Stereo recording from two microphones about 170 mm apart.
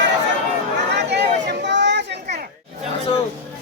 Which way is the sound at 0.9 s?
80° right.